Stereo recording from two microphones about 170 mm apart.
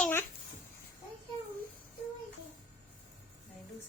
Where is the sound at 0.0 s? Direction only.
15° left (ahead or behind).